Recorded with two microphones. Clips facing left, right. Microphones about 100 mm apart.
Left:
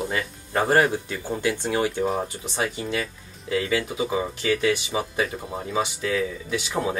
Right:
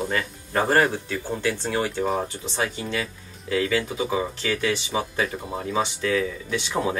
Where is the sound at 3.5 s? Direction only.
20° left (ahead or behind).